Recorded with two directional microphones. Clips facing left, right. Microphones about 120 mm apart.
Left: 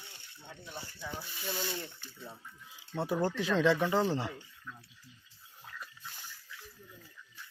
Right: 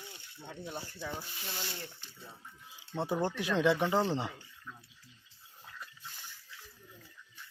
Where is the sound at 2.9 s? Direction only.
25° right (ahead or behind).